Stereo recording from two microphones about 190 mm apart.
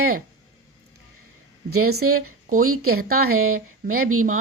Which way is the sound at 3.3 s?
90° right.